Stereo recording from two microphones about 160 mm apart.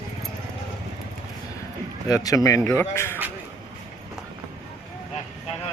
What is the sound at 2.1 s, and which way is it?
Speech, 20° left (ahead or behind).